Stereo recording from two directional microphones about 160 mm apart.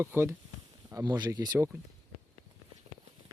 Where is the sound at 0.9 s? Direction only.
25° right (ahead or behind).